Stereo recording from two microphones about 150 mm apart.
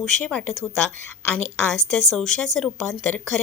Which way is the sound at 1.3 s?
10° left (ahead or behind).